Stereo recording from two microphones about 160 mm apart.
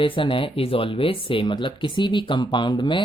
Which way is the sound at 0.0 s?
30° left (ahead or behind).